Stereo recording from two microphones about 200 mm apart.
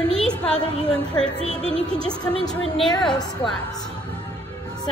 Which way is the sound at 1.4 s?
30° right (ahead or behind).